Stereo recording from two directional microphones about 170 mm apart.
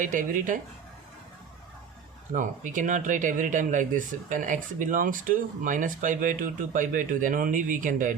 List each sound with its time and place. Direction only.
0.0 s speech: 50° right (ahead or behind)
2.3 s speech: 50° right (ahead or behind)